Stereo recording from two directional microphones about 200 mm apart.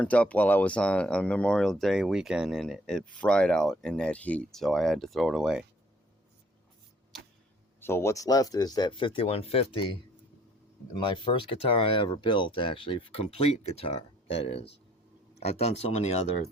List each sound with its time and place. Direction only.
0.0 s speech: 5° left (ahead or behind)
7.8 s speech: 10° left (ahead or behind); by 9.9 s 25° left (ahead or behind)
10.9 s speech: 25° left (ahead or behind)